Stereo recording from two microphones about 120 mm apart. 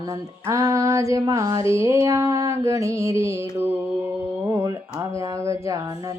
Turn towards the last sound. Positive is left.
turn(degrees=-25)  # may be behind; listen again after turning